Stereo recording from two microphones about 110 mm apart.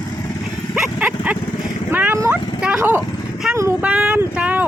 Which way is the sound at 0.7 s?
10° right (ahead or behind).